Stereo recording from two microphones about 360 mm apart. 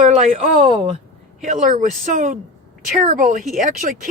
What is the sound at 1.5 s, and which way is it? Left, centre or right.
Speech, centre.